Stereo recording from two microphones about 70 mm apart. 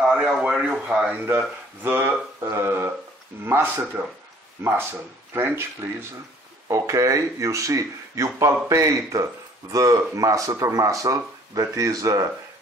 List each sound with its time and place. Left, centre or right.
0.0 s a sound: centre
0.4 s speech: centre
1.2 s speech: right
5.3 s speech: right
6.7 s speech: right